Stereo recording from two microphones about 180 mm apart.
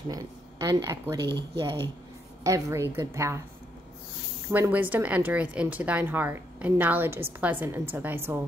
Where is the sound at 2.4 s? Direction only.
20° right (ahead or behind).